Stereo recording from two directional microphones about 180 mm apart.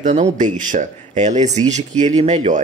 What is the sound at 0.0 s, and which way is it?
Speech, 40° right (ahead or behind).